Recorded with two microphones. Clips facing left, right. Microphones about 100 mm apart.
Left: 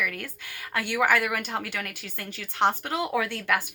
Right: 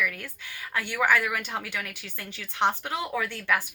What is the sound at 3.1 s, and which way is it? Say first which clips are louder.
Speech: left 1 dB; 60° left (ahead or behind).